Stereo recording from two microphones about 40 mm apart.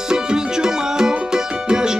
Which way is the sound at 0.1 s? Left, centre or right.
Centre.